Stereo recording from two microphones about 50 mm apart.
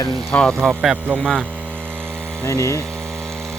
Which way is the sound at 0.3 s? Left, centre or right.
Left.